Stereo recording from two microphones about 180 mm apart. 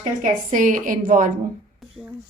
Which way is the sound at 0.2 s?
45° right (ahead or behind).